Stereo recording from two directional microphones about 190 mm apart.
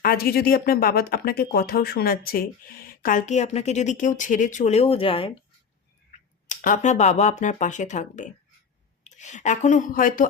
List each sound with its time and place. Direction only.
0.0 s speech: 50° left (ahead or behind); by 5.4 s 30° left (ahead or behind)
6.1 s a woman's voice: 40° left (ahead or behind)